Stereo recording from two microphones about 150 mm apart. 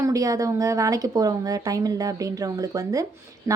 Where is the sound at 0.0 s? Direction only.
25° right (ahead or behind).